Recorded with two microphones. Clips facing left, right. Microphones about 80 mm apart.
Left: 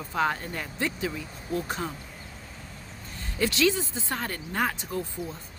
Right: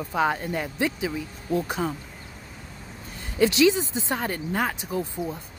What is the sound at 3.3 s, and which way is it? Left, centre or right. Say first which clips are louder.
Speech: right 5 dB; centre.